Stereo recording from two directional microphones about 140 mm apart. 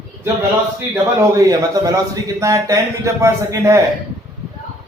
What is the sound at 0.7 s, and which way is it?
A man's voice, 20° right (ahead or behind).